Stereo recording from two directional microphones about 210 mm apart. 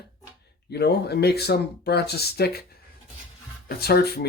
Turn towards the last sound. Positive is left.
turn(degrees=50)  # may be behind; listen again after turning